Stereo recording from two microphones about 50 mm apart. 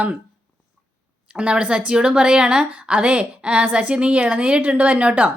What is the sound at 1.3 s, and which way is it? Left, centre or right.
A woman's voice, right.